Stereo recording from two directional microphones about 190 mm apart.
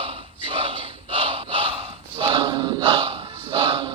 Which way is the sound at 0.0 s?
30° right (ahead or behind).